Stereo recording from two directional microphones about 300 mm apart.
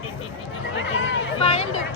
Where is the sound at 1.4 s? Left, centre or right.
Left.